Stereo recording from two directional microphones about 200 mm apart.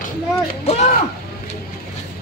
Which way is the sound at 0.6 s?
35° left (ahead or behind).